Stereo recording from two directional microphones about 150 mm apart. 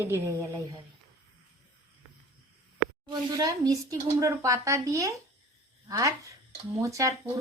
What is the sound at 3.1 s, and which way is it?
Speech, 25° right (ahead or behind).